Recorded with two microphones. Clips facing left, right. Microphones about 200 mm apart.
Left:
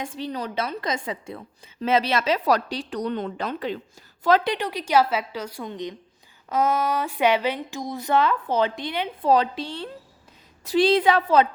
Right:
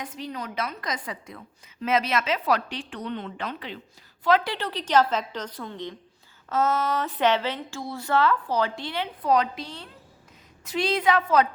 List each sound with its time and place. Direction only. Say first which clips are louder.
0.0 s a woman's voice: left 4 dB; 30° left (ahead or behind)
4.4 s speech: left 4 dB; 15° left (ahead or behind)
9.2 s a woman's voice: left 3 dB; 30° left (ahead or behind)